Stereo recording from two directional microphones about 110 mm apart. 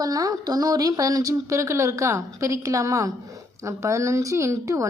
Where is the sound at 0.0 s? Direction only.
35° right (ahead or behind).